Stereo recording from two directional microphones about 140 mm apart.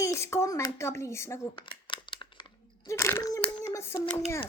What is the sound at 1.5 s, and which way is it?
Crumpling, 35° left (ahead or behind).